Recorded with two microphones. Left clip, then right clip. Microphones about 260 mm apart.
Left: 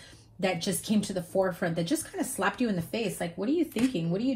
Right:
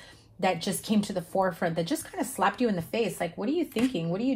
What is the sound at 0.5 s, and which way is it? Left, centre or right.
A woman's voice, right.